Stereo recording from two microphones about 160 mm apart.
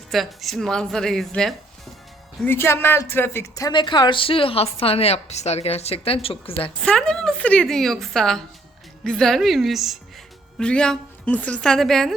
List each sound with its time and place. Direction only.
0.1 s a woman's voice: centre (ahead or behind)
2.4 s speech: 15° left (ahead or behind); by 6.7 s 35° left (ahead or behind)
6.7 s a woman's voice: 5° left (ahead or behind)